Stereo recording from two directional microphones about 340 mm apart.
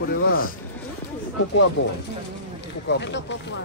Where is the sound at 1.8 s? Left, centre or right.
Left.